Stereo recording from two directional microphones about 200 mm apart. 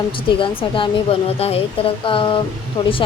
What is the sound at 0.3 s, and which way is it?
Speech, 25° left (ahead or behind).